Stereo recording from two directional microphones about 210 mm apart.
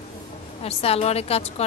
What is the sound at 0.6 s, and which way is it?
A woman's voice, 30° left (ahead or behind).